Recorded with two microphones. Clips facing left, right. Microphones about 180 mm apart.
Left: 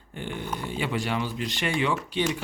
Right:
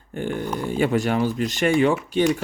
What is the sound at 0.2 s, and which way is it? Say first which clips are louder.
Speech: right 7 dB; 45° right (ahead or behind).